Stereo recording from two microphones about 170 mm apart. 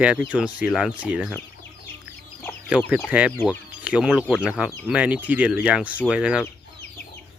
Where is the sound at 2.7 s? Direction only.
5° right (ahead or behind).